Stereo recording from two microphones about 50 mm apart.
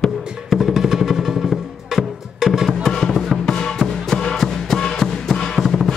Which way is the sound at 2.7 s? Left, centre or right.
Centre.